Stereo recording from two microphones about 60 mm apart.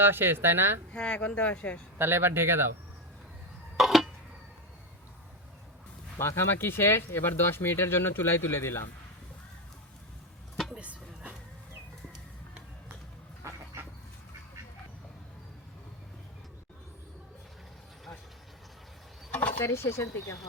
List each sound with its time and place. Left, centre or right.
0.0 s a woman's voice: right
0.9 s speech: centre
2.0 s a woman's voice: right
3.8 s a sound: centre
6.1 s speech: left
10.8 s a sound: right
13.4 s dog: right
19.3 s a sound: left
19.6 s speech: left